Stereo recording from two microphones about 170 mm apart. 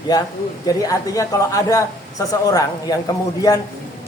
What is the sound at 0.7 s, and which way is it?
A woman's voice, 20° left (ahead or behind).